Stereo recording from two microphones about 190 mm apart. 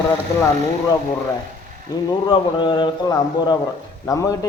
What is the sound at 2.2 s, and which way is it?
A man's voice, 25° left (ahead or behind).